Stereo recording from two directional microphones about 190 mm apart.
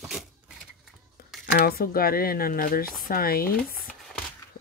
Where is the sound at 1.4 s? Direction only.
50° left (ahead or behind).